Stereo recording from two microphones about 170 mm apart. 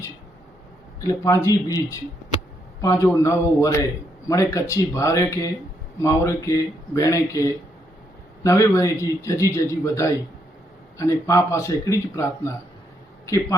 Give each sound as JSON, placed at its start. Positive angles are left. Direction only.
{"t": 1.0, "sound": "a man's voice", "side_deg": 20}